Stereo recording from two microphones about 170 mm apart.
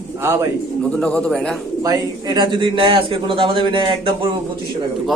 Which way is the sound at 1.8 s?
25° right (ahead or behind).